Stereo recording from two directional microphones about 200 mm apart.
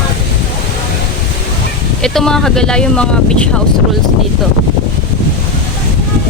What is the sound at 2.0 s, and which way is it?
Speech, 5° left (ahead or behind).